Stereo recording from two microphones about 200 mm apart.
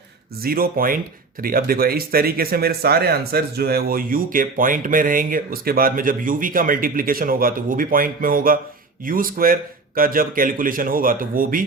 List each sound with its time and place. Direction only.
0.4 s speech: 45° right (ahead or behind)